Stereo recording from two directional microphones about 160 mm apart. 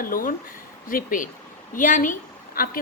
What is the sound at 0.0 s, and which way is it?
A woman's voice, 60° left (ahead or behind).